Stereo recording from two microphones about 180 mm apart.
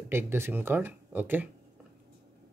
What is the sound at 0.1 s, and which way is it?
Speech, 15° right (ahead or behind).